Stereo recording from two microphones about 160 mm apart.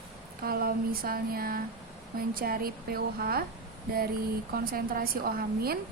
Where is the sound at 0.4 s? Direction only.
70° right (ahead or behind).